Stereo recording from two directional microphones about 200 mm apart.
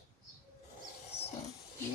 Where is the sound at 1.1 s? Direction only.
30° left (ahead or behind).